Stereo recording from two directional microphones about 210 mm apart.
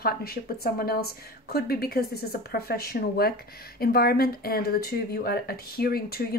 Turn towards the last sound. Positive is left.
turn(degrees=45)  # may be behind; listen again after turning